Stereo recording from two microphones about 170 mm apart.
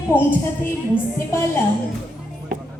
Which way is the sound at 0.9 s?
15° left (ahead or behind).